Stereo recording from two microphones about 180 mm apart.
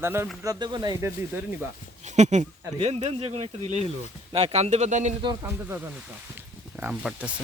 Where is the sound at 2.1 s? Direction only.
40° right (ahead or behind).